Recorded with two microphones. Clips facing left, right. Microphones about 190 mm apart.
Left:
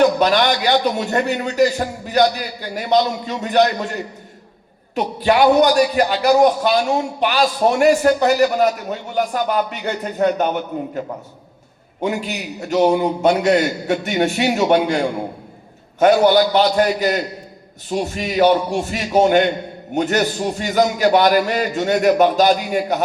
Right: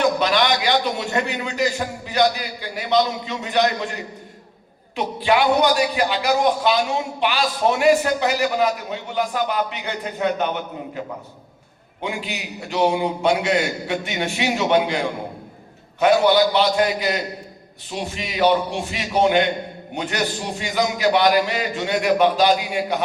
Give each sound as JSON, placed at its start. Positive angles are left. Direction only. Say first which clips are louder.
{"t": 0.0, "sound": "a man's voice", "louder": "left 4 dB", "side_deg": 45}
{"t": 12.0, "sound": "a man's voice", "louder": "left 6 dB", "side_deg": 45}